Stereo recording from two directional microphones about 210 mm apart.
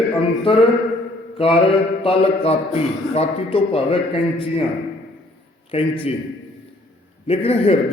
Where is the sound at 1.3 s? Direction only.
25° left (ahead or behind).